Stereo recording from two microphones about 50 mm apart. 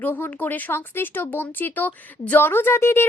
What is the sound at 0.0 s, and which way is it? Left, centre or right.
Speech, left.